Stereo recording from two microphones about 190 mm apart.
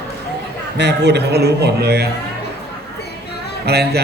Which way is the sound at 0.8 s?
60° right (ahead or behind).